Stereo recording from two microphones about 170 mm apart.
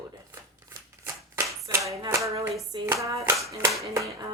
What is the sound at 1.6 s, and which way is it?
Hands, 20° right (ahead or behind).